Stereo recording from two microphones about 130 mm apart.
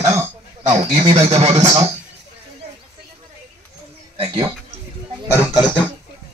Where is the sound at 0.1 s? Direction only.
60° right (ahead or behind).